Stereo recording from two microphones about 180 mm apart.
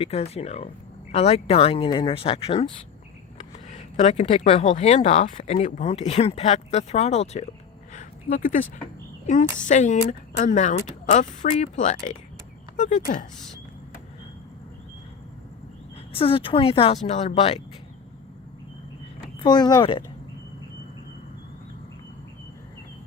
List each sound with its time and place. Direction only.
0.0 s speech: 35° left (ahead or behind)
3.7 s speech: 35° left (ahead or behind)
7.9 s a sound: 50° left (ahead or behind)
9.2 s a woman's voice: 45° left (ahead or behind)
16.1 s speech: 30° left (ahead or behind)
19.4 s speech: 25° left (ahead or behind)